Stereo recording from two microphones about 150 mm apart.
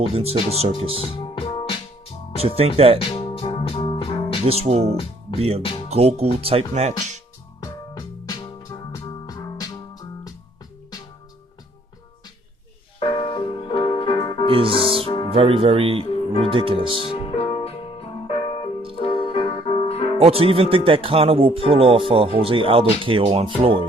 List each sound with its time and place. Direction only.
0.1 s speech: 40° right (ahead or behind)
0.9 s music: 40° left (ahead or behind)
2.6 s speech: 40° right (ahead or behind)
3.0 s music: 40° left (ahead or behind)
4.4 s speech: 45° right (ahead or behind)
7.6 s music: 25° left (ahead or behind)
13.0 s music: 35° left (ahead or behind)
14.4 s music: 35° right (ahead or behind)
15.3 s speech: 40° right (ahead or behind)
17.0 s music: 35° left (ahead or behind)
20.1 s speech: 40° right (ahead or behind)